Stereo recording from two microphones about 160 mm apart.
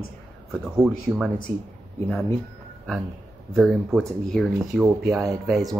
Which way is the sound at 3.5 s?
Centre (ahead or behind).